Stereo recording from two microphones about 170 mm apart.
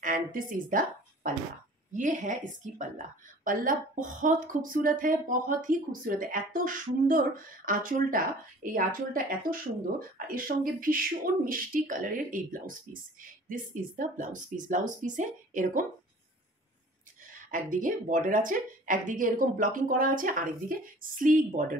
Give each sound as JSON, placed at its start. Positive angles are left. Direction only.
{"t": 0.0, "sound": "a woman's voice", "side_deg": -50}
{"t": 17.5, "sound": "a woman's voice", "side_deg": -50}